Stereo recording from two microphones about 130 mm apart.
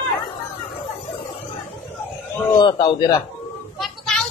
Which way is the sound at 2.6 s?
40° left (ahead or behind).